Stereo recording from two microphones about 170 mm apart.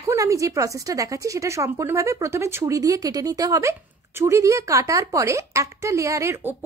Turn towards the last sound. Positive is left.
turn(degrees=-15)  # may be behind; listen again after turning